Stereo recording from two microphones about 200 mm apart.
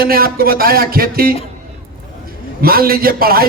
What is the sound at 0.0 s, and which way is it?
A man's voice, 45° right (ahead or behind).